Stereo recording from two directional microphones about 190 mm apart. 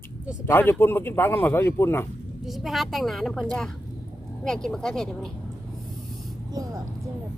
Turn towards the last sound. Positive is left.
turn(degrees=-20)  # may be behind; listen again after turning